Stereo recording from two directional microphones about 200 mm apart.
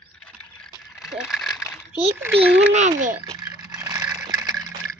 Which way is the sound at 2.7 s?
35° right (ahead or behind).